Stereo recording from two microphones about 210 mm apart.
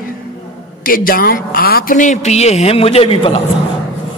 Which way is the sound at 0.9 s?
45° left (ahead or behind).